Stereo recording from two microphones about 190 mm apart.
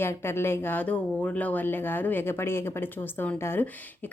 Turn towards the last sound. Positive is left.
turn(degrees=10)  # may be behind; listen again after turning